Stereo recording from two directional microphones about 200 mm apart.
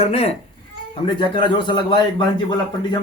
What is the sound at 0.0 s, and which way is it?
Speech, 30° left (ahead or behind).